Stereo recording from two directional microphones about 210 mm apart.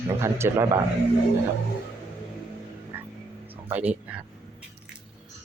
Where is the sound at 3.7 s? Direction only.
5° right (ahead or behind).